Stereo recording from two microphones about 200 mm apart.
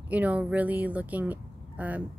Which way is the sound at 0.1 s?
5° right (ahead or behind).